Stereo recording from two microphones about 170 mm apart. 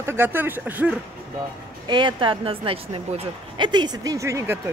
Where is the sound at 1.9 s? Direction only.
25° right (ahead or behind).